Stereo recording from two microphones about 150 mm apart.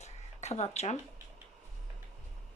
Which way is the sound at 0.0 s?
50° left (ahead or behind).